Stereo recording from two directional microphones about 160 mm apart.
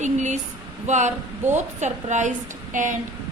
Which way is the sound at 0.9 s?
50° right (ahead or behind).